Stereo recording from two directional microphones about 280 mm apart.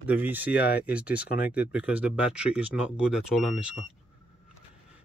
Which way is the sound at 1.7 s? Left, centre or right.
Centre.